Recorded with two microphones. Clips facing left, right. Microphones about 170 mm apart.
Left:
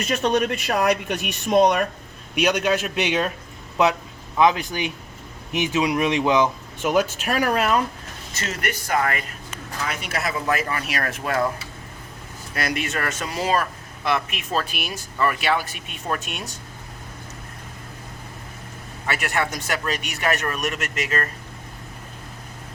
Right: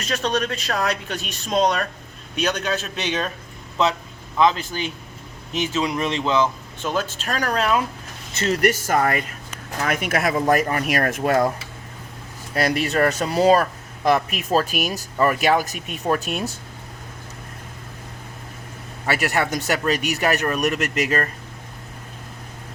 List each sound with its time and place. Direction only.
0.1 s speech: 15° left (ahead or behind)
4.4 s speech: 15° left (ahead or behind)
8.4 s speech: 35° right (ahead or behind)
9.8 s speech: 50° right (ahead or behind)
12.5 s speech: 35° right (ahead or behind)
19.0 s speech: 35° right (ahead or behind)
19.5 s speech: centre (ahead or behind)
20.8 s speech: 35° right (ahead or behind)